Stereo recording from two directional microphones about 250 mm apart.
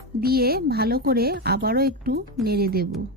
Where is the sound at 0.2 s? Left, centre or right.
Right.